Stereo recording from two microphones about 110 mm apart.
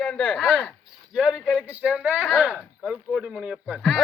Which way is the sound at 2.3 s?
5° right (ahead or behind).